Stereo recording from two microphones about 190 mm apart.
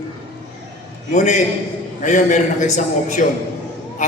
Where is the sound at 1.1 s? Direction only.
40° left (ahead or behind).